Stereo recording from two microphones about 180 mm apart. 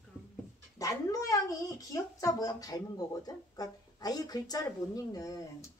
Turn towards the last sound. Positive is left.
turn(degrees=20)  # may be behind; listen again after turning